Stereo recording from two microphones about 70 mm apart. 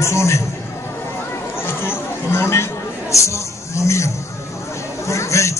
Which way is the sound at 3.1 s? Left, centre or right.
Left.